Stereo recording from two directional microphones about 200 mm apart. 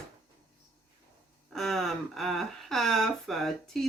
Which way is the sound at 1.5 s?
Centre (ahead or behind).